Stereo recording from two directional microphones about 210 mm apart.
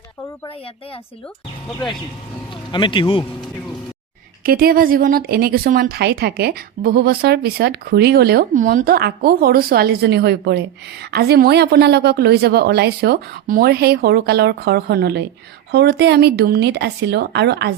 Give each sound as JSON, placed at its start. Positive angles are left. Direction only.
{"t": 0.4, "sound": "speech", "side_deg": 25}
{"t": 2.5, "sound": "speech", "side_deg": 25}
{"t": 4.4, "sound": "a woman's voice", "side_deg": -45}